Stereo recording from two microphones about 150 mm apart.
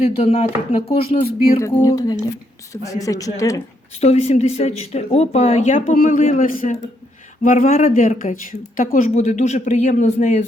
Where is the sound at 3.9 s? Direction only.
45° left (ahead or behind).